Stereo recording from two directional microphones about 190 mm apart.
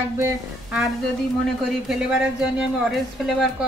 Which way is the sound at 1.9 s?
5° right (ahead or behind).